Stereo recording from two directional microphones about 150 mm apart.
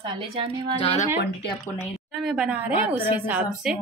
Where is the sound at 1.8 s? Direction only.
5° right (ahead or behind).